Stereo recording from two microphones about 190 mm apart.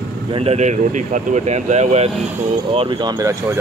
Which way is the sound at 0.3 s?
30° right (ahead or behind).